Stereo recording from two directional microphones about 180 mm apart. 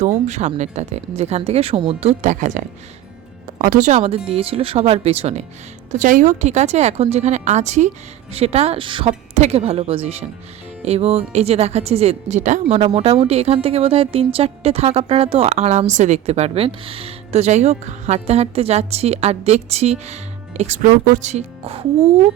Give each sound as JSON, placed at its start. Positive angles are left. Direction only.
{"t": 0.0, "sound": "a woman's voice", "side_deg": -40}